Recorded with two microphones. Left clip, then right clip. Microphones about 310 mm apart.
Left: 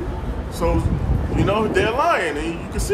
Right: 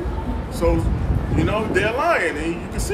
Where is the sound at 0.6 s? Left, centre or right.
Centre.